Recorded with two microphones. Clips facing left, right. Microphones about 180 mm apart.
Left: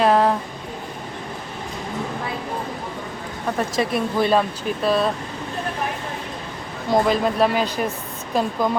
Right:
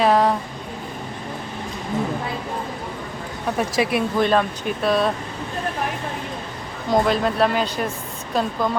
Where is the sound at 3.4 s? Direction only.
5° right (ahead or behind).